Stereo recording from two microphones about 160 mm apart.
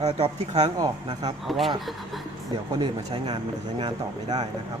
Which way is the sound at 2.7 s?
30° right (ahead or behind).